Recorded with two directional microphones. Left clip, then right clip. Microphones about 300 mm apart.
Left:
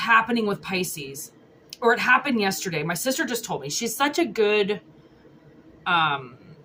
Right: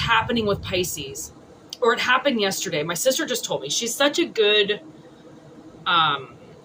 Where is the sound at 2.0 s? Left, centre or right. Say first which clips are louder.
Even; centre.